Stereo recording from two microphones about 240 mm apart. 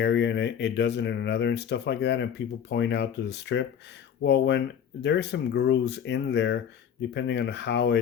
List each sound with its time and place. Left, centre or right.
0.0 s speech: left